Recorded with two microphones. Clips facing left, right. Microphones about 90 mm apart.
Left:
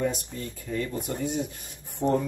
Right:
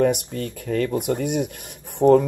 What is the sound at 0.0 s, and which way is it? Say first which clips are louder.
Speech: right 9 dB; 70° right (ahead or behind).